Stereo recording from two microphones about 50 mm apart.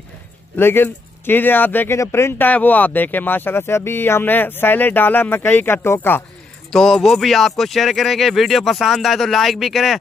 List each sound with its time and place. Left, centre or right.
0.6 s speech: left
1.9 s speech: left
2.3 s speech: left
6.7 s a man's voice: centre